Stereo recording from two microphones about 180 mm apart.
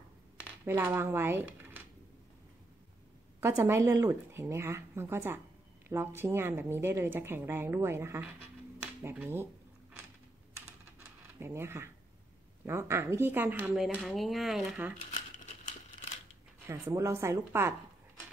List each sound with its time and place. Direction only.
0.7 s a woman's voice: 15° right (ahead or behind)
3.3 s a woman's voice: 15° right (ahead or behind)
11.3 s a woman's voice: 15° right (ahead or behind)
13.9 s speech: centre (ahead or behind)
15.0 s crumpling: 45° left (ahead or behind)
16.6 s a woman's voice: 15° right (ahead or behind)